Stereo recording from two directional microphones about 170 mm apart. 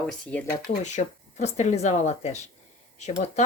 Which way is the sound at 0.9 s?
40° left (ahead or behind).